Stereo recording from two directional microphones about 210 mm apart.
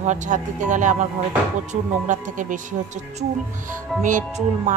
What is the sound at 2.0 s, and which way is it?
Speech, 35° right (ahead or behind).